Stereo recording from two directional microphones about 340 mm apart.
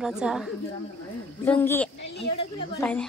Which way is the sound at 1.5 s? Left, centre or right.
Centre.